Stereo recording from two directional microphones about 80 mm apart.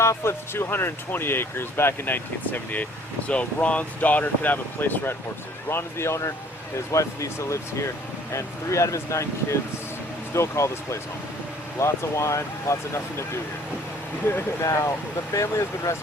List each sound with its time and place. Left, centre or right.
0.0 s speech: left
14.3 s speech: left